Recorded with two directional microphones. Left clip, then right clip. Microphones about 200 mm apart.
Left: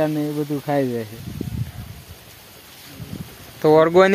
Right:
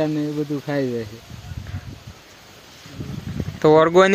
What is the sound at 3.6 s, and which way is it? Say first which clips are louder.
Speech: even; 10° right (ahead or behind).